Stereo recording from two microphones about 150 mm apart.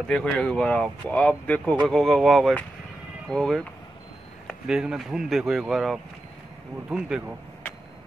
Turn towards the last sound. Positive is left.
turn(degrees=-5)  # may be behind; listen again after turning